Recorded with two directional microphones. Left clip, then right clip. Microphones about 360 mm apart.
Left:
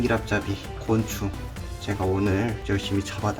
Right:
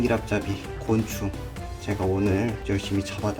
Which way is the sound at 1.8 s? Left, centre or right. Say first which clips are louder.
Even; centre.